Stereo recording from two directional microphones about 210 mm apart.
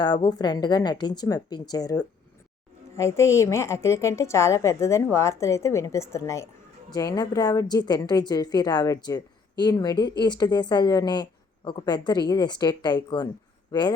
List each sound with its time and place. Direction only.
0.0 s a woman's voice: 20° left (ahead or behind)